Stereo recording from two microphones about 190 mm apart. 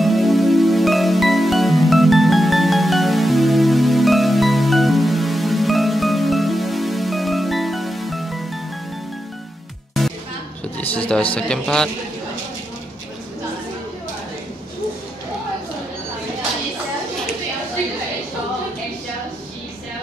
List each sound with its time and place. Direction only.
0.0 s music: centre (ahead or behind)
10.8 s a sound: 5° left (ahead or behind)
11.3 s speech: 5° left (ahead or behind)